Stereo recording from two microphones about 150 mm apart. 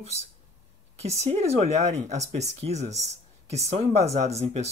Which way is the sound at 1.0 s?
45° right (ahead or behind).